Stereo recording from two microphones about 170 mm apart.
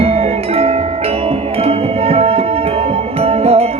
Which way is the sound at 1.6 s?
35° right (ahead or behind).